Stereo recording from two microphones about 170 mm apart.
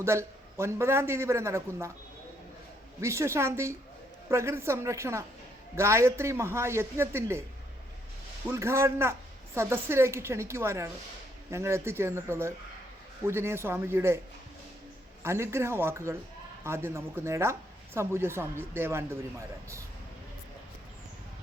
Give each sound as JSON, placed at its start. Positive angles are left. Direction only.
{"t": 0.0, "sound": "speech", "side_deg": -15}
{"t": 3.0, "sound": "speech", "side_deg": -15}
{"t": 8.4, "sound": "speech", "side_deg": -15}
{"t": 15.2, "sound": "speech", "side_deg": -15}